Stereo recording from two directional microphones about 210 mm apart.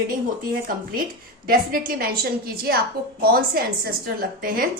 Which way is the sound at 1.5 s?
45° right (ahead or behind).